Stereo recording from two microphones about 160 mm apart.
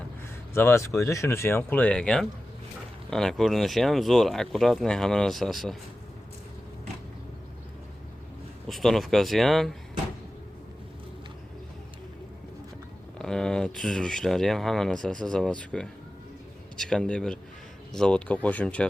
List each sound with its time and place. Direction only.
0.5 s speech: 15° left (ahead or behind)
8.6 s speech: centre (ahead or behind)
13.1 s a man's voice: 5° left (ahead or behind)